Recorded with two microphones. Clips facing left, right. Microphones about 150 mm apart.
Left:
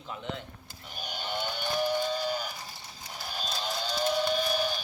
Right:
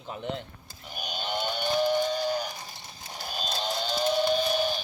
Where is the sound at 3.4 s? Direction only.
25° right (ahead or behind).